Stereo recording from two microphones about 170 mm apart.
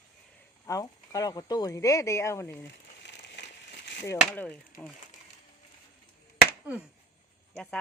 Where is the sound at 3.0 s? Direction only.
90° left.